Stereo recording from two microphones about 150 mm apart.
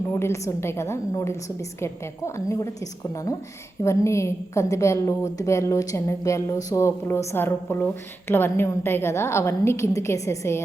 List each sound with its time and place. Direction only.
0.1 s a woman's voice: 20° left (ahead or behind)
3.8 s a woman's voice: 20° left (ahead or behind)